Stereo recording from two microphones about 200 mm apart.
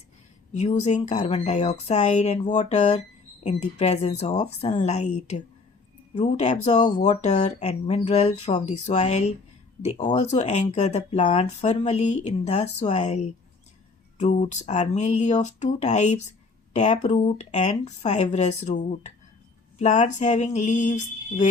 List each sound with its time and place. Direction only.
0.9 s speech: 35° left (ahead or behind)
6.2 s speech: 35° left (ahead or behind)